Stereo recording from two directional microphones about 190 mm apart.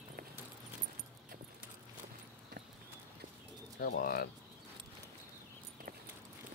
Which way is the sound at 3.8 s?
50° left (ahead or behind).